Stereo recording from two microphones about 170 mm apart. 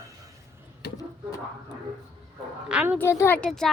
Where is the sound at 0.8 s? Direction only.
75° left (ahead or behind).